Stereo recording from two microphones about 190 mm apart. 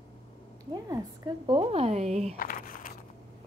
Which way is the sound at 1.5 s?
30° right (ahead or behind).